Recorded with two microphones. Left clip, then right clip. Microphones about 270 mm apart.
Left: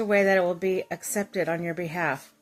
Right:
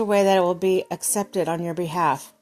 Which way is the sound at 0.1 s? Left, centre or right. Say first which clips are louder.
Right 3 dB; centre.